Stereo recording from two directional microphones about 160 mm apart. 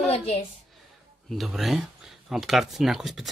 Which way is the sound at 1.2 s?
Centre (ahead or behind).